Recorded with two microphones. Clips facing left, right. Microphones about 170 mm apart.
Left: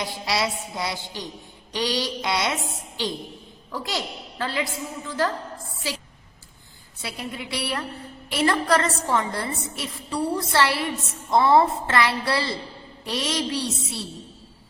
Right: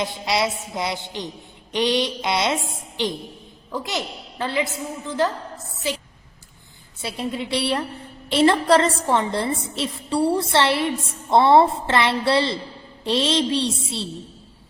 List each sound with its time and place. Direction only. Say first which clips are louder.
0.0 s a woman's voice: right 3 dB; 20° right (ahead or behind)
7.0 s a woman's voice: right 6 dB; 25° right (ahead or behind)